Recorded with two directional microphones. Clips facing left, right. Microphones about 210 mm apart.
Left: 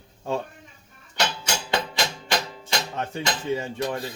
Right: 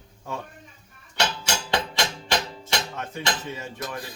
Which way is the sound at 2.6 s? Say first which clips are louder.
Left 1 dB; 30° left (ahead or behind).